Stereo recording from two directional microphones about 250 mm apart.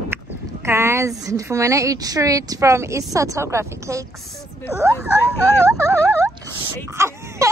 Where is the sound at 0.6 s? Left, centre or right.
Centre.